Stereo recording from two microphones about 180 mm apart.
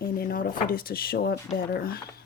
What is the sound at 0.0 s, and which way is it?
Speech, 55° left (ahead or behind).